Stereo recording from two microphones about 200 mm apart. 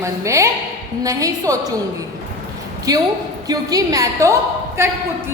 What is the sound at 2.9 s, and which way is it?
A woman's voice, 20° right (ahead or behind).